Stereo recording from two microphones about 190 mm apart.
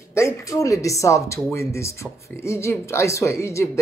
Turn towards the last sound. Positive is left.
turn(degrees=15)  # may be behind; listen again after turning